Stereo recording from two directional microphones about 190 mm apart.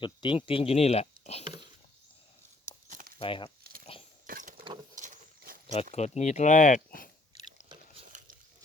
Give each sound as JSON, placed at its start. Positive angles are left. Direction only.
{"t": 0.0, "sound": "speech", "side_deg": 25}
{"t": 3.2, "sound": "speech", "side_deg": 25}
{"t": 3.6, "sound": "a sound", "side_deg": -50}
{"t": 4.9, "sound": "horse", "side_deg": -45}
{"t": 5.9, "sound": "chewing", "side_deg": 35}